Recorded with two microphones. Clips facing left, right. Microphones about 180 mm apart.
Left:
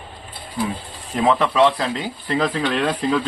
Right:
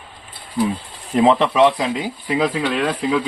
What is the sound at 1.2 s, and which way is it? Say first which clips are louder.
Speech: right 3 dB; 20° right (ahead or behind).